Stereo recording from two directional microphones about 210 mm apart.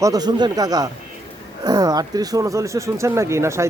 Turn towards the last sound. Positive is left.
turn(degrees=-15)  # may be behind; listen again after turning